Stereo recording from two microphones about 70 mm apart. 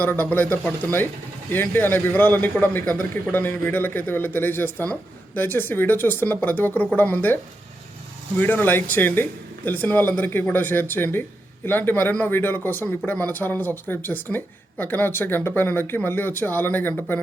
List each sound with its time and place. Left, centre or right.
0.0 s a man's voice: left
8.4 s a man's voice: left